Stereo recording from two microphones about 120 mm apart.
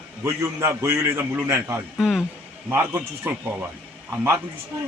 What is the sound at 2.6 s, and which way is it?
Speech, 20° right (ahead or behind).